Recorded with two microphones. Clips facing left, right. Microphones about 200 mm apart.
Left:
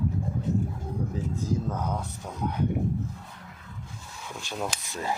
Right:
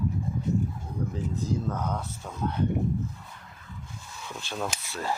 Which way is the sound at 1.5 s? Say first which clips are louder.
Left 1 dB; 10° left (ahead or behind).